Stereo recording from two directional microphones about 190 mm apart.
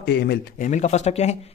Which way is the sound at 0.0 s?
60° left (ahead or behind).